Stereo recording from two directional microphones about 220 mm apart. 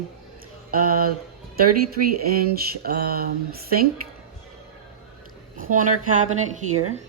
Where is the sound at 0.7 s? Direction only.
40° right (ahead or behind).